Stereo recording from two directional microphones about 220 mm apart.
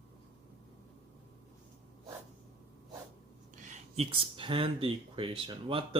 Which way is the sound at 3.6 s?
35° right (ahead or behind).